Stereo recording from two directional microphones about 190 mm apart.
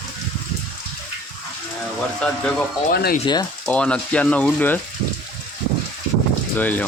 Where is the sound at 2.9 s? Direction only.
55° left (ahead or behind).